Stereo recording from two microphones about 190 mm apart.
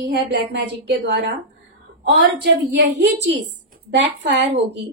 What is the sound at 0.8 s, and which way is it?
Speech, 70° right (ahead or behind).